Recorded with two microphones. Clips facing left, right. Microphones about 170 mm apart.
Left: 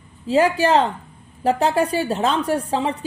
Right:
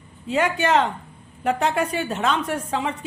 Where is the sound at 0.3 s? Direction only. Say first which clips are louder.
Left 4 dB; 30° left (ahead or behind).